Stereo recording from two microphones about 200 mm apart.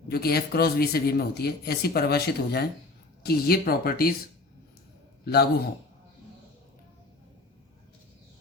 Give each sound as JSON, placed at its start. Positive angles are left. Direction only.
{"t": 0.1, "sound": "speech", "side_deg": 50}
{"t": 5.2, "sound": "a man's voice", "side_deg": 55}